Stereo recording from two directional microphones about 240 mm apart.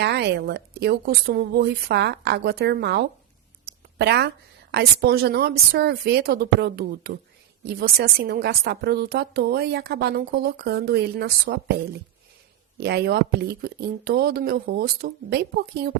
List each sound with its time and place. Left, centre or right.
0.0 s a woman's voice: right
3.7 s a sound: right
4.7 s a woman's voice: right